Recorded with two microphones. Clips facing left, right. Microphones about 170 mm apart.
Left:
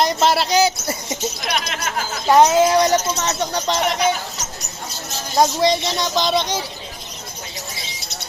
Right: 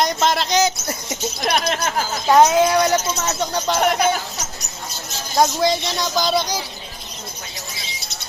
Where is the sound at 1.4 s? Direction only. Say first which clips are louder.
Right 8 dB; 40° right (ahead or behind).